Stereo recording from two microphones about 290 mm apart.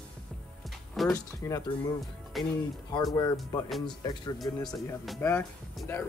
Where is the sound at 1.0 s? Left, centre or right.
Centre.